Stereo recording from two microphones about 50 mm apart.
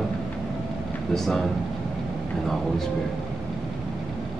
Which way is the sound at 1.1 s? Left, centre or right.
Centre.